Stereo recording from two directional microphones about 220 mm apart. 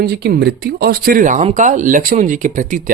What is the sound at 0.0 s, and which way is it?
Speech, 45° right (ahead or behind).